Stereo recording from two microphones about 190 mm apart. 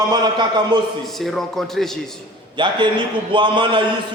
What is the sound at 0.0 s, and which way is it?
Speech, 20° right (ahead or behind).